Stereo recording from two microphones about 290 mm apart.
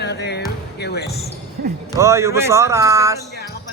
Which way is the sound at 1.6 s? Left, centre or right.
Right.